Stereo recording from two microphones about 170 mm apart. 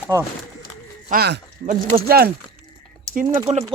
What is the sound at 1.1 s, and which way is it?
Speech, 70° right (ahead or behind).